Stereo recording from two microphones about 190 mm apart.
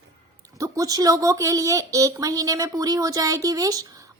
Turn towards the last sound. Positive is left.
turn(degrees=-20)  # may be behind; listen again after turning